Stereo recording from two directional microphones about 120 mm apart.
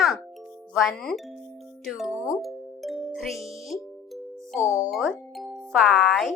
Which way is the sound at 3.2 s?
Centre (ahead or behind).